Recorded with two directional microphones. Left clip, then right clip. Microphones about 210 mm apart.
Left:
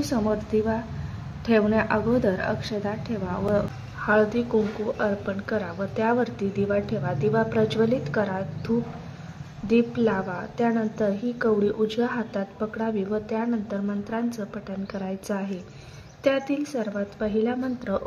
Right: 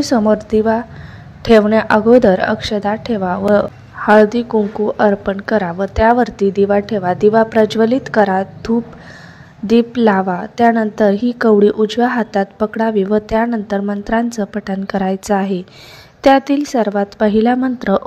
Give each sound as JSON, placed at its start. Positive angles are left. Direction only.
{"t": 0.0, "sound": "a woman's voice", "side_deg": -35}